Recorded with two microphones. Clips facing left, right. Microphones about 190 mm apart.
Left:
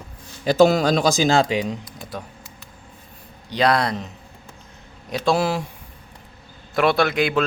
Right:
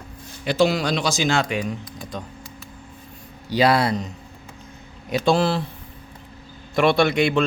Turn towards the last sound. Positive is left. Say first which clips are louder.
# right 1 dB
turn(degrees=0)  # may be behind; listen again after turning